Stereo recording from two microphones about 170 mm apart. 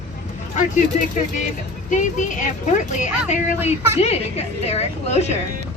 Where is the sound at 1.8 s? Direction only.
50° left (ahead or behind).